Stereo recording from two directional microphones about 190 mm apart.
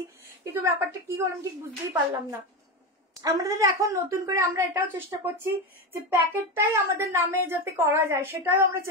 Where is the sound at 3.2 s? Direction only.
15° right (ahead or behind).